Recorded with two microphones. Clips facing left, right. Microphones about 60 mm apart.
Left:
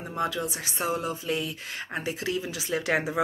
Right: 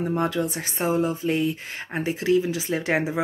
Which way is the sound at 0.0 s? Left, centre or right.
Right.